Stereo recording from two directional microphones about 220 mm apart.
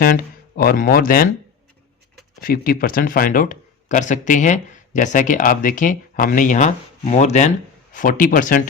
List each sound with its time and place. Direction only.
0.0 s speech: 40° left (ahead or behind)
2.4 s speech: 40° left (ahead or behind)